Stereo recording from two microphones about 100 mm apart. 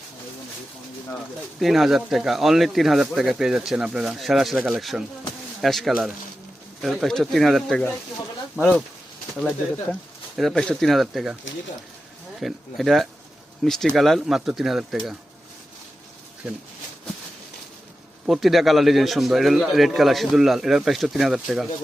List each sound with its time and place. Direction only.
1.5 s speech: centre (ahead or behind)
8.6 s speech: 25° left (ahead or behind)
9.4 s speech: 10° left (ahead or behind)
12.4 s speech: centre (ahead or behind)
18.3 s speech: centre (ahead or behind)